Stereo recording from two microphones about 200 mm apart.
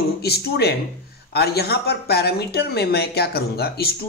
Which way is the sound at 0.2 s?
55° left (ahead or behind).